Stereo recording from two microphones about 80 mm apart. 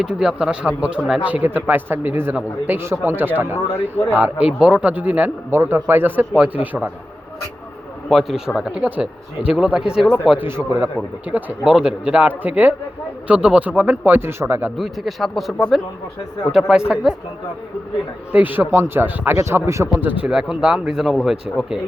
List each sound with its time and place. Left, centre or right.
0.0 s speech: centre; by 3.6 s right
4.2 s speech: centre
5.5 s speech: right
8.1 s speech: centre
10.3 s speech: right
11.6 s speech: centre; by 14.7 s right
14.8 s speech: centre
18.3 s speech: right
19.4 s speech: right
20.2 s speech: centre
21.5 s speech: centre